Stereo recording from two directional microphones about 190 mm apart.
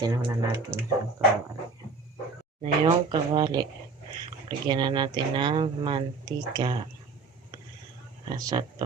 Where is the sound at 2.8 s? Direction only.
25° right (ahead or behind).